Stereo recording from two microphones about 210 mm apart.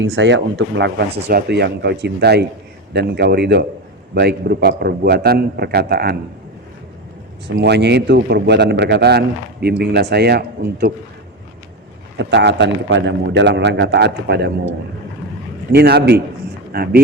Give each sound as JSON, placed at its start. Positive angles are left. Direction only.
{"t": 0.0, "sound": "a man's voice", "side_deg": -60}
{"t": 7.4, "sound": "a man's voice", "side_deg": -50}
{"t": 12.1, "sound": "a man's voice", "side_deg": -55}
{"t": 15.7, "sound": "a man's voice", "side_deg": -50}